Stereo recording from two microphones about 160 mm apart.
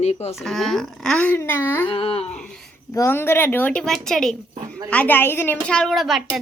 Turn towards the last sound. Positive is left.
turn(degrees=0)  # may be behind; listen again after turning